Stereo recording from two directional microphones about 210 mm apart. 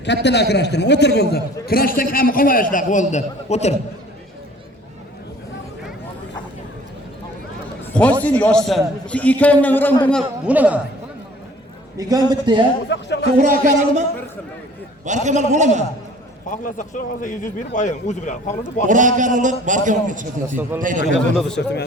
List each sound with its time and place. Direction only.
0.0 s a man's voice: 55° left (ahead or behind); by 3.8 s 30° left (ahead or behind)
8.2 s a man's voice: 5° left (ahead or behind)
11.9 s a man's voice: 15° right (ahead or behind)
12.9 s speech: 55° left (ahead or behind)
13.3 s a man's voice: 40° right (ahead or behind)
15.0 s a man's voice: 35° right (ahead or behind)
16.5 s speech: 40° left (ahead or behind)
18.9 s a man's voice: 35° right (ahead or behind)
20.6 s a man's voice: 10° right (ahead or behind)
21.3 s speech: 5° left (ahead or behind)